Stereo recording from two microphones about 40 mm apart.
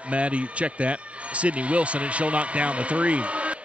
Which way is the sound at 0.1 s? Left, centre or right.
Right.